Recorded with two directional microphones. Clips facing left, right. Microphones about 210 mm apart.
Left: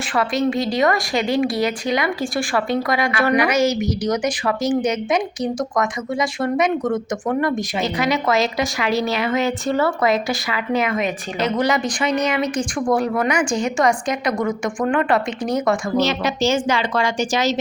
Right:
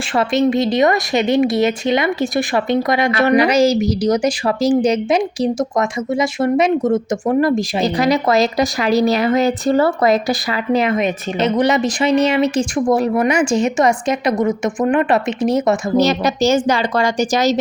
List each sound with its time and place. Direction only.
0.1 s speech: 25° right (ahead or behind)
3.3 s a woman's voice: 35° right (ahead or behind)
10.9 s speech: 20° right (ahead or behind)
16.0 s a woman's voice: 40° right (ahead or behind)